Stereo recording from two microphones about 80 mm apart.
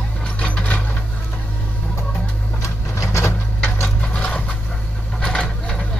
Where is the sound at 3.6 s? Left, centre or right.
Left.